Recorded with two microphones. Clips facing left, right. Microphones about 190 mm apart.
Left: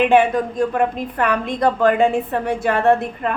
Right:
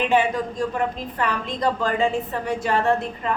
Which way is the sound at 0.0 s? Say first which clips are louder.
Left 6 dB; 60° left (ahead or behind).